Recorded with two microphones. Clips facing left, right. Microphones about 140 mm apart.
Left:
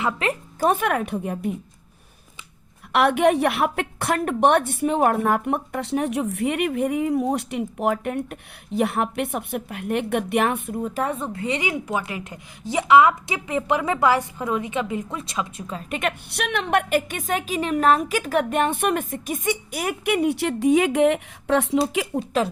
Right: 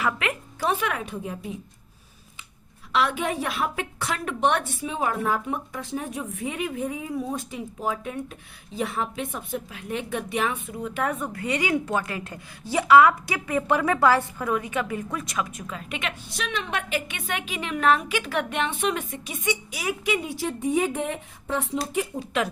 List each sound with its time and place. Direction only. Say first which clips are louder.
0.2 s a sound: left 5 dB; 35° left (ahead or behind)
0.7 s speech: left 4 dB; 50° left (ahead or behind)
2.9 s speech: left 7 dB; 60° left (ahead or behind)
10.8 s a woman's voice: even; 35° left (ahead or behind)
15.9 s a woman's voice: left 7 dB; 50° left (ahead or behind)
16.3 s a woman's voice: left 7 dB; 60° left (ahead or behind); by 22.0 s 90° left